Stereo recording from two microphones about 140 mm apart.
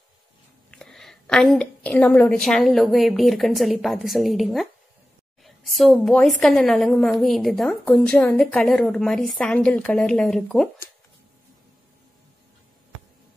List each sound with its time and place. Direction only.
0.7 s a woman's voice: 5° left (ahead or behind)